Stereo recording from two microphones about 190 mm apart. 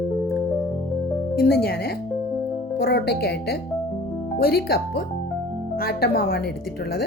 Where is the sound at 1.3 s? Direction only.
55° left (ahead or behind).